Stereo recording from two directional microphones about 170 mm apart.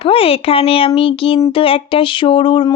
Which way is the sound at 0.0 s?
35° left (ahead or behind).